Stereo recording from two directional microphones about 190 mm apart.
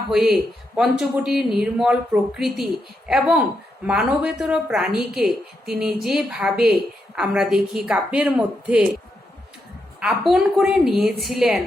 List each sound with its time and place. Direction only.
0.1 s speech: centre (ahead or behind)
10.0 s speech: centre (ahead or behind)